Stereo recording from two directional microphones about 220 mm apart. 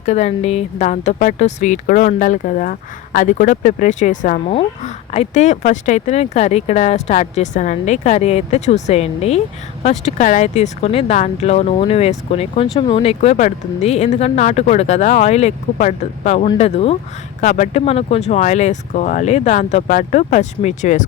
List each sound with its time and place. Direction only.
0.0 s speech: 30° left (ahead or behind)